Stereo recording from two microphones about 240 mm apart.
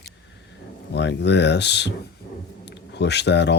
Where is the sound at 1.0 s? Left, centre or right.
Left.